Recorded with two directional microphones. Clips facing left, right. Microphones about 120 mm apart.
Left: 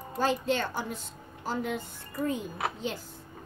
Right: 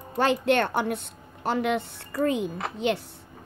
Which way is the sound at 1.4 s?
75° right (ahead or behind).